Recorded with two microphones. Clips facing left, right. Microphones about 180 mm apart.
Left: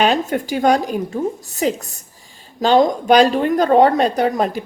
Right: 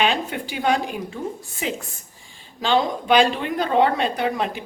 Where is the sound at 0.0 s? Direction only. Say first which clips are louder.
Left 6 dB; 45° left (ahead or behind).